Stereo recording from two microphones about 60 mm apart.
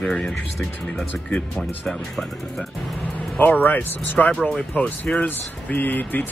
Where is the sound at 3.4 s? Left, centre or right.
Left.